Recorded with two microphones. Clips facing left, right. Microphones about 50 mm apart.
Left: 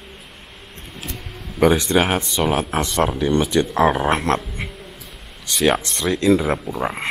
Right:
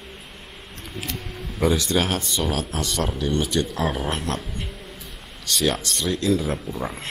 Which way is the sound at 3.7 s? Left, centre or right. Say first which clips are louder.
Left 8 dB; left.